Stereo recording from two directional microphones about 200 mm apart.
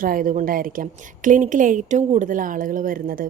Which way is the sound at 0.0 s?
45° right (ahead or behind).